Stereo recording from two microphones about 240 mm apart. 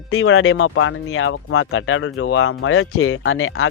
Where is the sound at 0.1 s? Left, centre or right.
Left.